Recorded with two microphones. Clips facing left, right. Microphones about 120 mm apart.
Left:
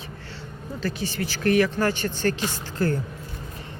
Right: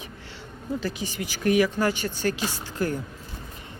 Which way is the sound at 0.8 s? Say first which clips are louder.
Left 5 dB; 15° right (ahead or behind).